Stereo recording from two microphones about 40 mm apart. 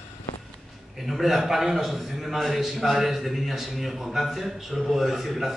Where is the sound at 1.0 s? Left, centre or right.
Centre.